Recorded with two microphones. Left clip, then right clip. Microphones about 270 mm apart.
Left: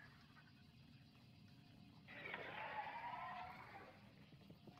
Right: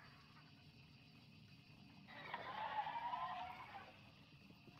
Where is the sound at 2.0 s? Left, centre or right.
Right.